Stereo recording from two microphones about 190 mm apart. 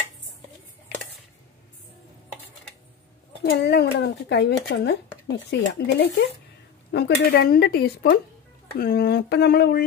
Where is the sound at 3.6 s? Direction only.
60° left (ahead or behind).